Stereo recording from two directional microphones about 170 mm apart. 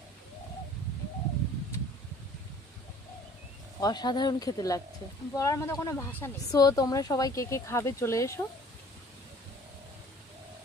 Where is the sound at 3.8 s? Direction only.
25° left (ahead or behind).